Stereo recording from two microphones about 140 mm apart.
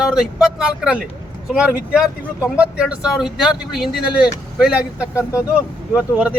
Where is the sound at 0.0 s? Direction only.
5° right (ahead or behind).